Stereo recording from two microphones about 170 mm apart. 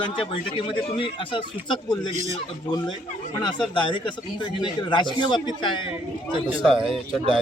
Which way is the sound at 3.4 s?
30° left (ahead or behind).